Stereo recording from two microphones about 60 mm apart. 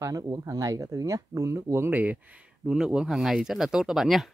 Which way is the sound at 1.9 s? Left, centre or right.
Right.